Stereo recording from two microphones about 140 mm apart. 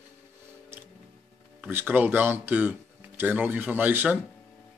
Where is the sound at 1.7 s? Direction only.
15° right (ahead or behind).